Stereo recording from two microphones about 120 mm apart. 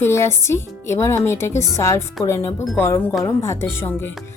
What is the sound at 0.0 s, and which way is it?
Speech, 20° left (ahead or behind).